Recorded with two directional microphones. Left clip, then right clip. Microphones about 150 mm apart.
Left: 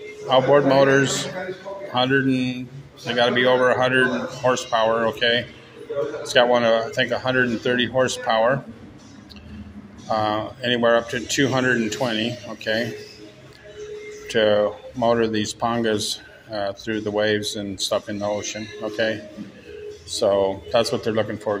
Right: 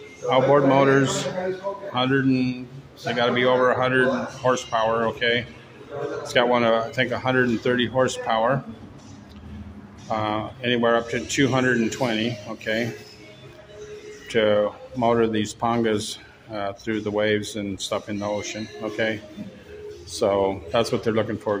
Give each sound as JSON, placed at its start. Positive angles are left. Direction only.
{"t": 0.3, "sound": "speech", "side_deg": -15}
{"t": 2.2, "sound": "speech", "side_deg": -20}
{"t": 3.1, "sound": "speech", "side_deg": -10}
{"t": 10.0, "sound": "speech", "side_deg": -15}
{"t": 14.2, "sound": "speech", "side_deg": -15}